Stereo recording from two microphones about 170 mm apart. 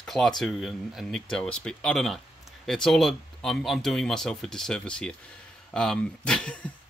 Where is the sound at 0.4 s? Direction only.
Centre (ahead or behind).